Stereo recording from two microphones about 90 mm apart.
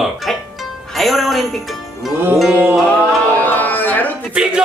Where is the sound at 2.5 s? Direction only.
20° right (ahead or behind).